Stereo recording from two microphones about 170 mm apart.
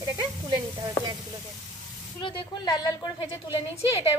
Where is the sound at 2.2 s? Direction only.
30° left (ahead or behind).